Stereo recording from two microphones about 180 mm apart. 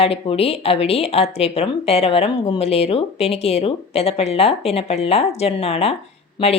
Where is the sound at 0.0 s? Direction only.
35° left (ahead or behind).